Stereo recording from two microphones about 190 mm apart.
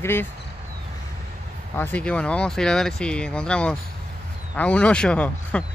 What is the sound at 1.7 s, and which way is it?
Speech, 10° left (ahead or behind).